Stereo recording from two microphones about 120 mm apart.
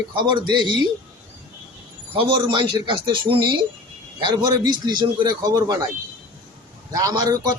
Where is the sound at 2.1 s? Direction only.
45° right (ahead or behind).